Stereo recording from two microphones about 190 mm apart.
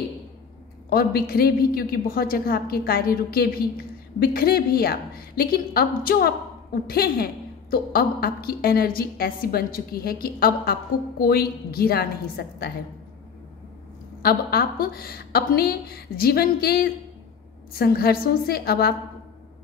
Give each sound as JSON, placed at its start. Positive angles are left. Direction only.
{"t": 0.8, "sound": "a woman's voice", "side_deg": 50}
{"t": 14.2, "sound": "a woman's voice", "side_deg": 50}